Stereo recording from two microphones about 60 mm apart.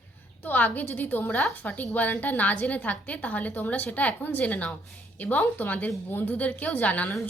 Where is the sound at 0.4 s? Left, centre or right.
Left.